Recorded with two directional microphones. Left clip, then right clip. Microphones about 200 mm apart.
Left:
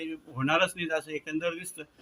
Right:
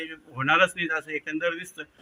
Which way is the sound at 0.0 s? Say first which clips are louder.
Right 4 dB; 5° left (ahead or behind).